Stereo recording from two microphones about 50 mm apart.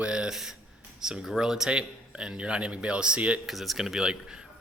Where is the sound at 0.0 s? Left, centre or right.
Centre.